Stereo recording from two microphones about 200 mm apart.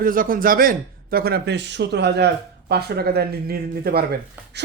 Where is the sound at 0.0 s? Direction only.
45° right (ahead or behind).